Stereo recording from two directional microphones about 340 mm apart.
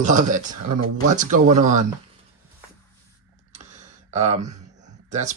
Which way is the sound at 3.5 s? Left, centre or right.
Centre.